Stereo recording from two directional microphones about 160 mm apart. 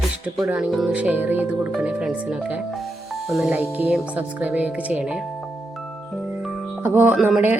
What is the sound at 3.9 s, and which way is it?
Speech, 10° right (ahead or behind).